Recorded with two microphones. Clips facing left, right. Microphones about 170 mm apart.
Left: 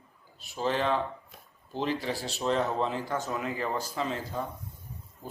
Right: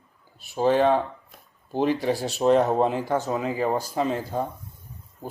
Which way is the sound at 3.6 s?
45° right (ahead or behind).